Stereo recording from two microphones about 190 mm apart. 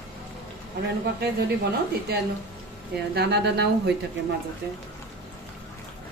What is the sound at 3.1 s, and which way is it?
Speech, 60° right (ahead or behind).